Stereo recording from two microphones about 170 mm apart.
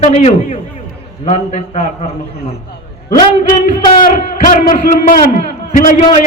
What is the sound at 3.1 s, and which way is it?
A man's voice, 50° left (ahead or behind).